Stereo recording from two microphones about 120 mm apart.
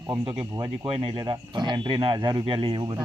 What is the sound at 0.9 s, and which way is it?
Speech, 50° right (ahead or behind).